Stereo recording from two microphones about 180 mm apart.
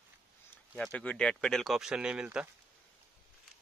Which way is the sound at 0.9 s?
5° left (ahead or behind).